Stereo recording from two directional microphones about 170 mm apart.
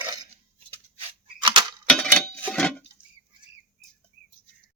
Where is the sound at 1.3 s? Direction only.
25° right (ahead or behind).